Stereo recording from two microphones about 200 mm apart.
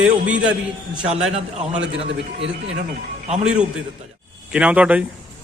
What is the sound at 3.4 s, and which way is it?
A man's voice, 5° right (ahead or behind).